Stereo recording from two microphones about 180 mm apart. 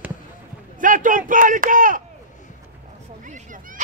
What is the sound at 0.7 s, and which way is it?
Speech, 45° right (ahead or behind).